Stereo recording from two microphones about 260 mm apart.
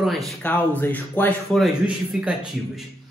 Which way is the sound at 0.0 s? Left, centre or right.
Centre.